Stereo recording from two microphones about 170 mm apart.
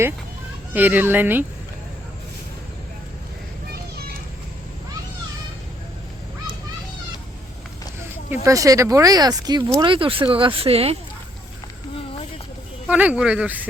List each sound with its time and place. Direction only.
0.7 s a child's voice: 10° right (ahead or behind)
8.4 s speech: 20° right (ahead or behind); by 10.9 s 35° right (ahead or behind)
12.9 s a child's voice: 10° right (ahead or behind)